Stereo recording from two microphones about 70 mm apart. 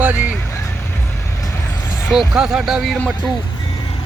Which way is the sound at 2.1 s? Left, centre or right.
Centre.